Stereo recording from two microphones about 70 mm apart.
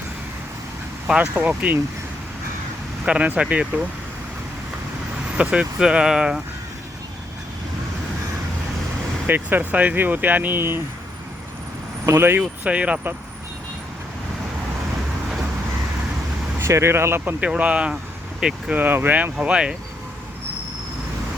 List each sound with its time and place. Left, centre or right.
1.0 s speech: centre
3.0 s speech: centre
5.4 s speech: centre
9.2 s speech: right
12.0 s speech: right
12.4 s speech: centre
16.6 s speech: right
17.4 s speech: centre
18.8 s speech: right